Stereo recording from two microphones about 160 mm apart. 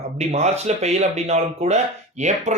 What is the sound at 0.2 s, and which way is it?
Speech, 45° right (ahead or behind).